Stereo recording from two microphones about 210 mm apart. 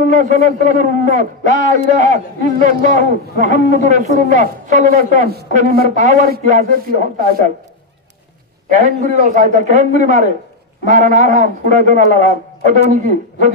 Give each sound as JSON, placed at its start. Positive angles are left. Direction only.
{"t": 0.0, "sound": "a man's voice", "side_deg": -35}
{"t": 8.7, "sound": "a man's voice", "side_deg": -35}